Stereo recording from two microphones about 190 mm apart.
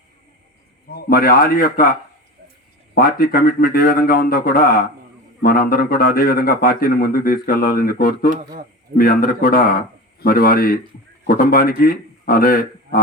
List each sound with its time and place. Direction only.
0.9 s a man's voice: 50° left (ahead or behind)
2.9 s a man's voice: 50° left (ahead or behind)